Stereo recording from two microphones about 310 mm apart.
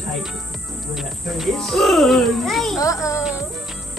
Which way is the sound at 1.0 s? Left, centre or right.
Centre.